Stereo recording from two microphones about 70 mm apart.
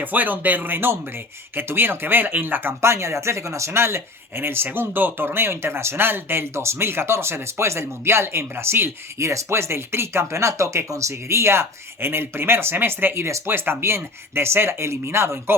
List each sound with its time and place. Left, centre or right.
0.0 s speech: right
2.8 s speech: right